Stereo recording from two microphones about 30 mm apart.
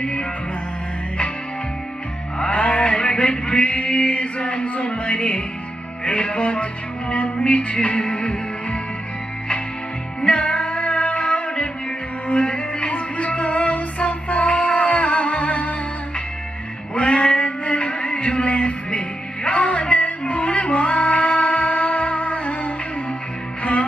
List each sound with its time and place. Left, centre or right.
2.5 s a sound: left
3.6 s music: left
10.2 s female singing: left
12.3 s music: left
16.9 s music: left